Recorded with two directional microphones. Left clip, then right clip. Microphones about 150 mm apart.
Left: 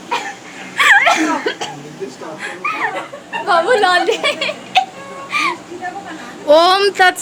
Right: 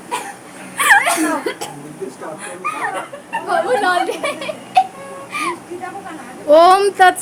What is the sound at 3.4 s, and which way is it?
Speech, 20° left (ahead or behind).